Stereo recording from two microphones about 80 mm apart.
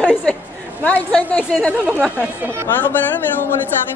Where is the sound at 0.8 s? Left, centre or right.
Centre.